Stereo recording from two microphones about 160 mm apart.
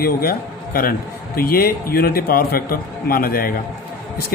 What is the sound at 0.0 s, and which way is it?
A man's voice, 70° left (ahead or behind).